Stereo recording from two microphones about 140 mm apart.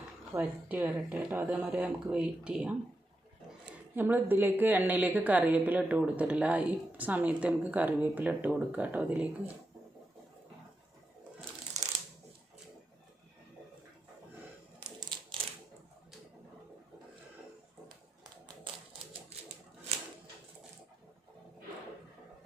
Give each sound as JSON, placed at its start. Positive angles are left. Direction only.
{"t": 0.3, "sound": "a woman's voice", "side_deg": -10}
{"t": 3.9, "sound": "a woman's voice", "side_deg": -15}
{"t": 18.2, "sound": "a sound", "side_deg": -30}